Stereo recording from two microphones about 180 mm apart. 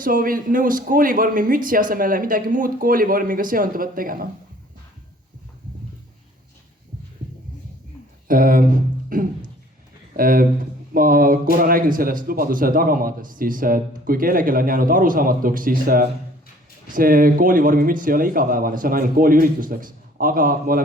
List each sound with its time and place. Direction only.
0.0 s a man's voice: 50° right (ahead or behind)
8.3 s a man's voice: 50° right (ahead or behind)